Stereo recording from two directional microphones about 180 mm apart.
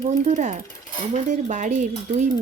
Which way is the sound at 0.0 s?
40° right (ahead or behind).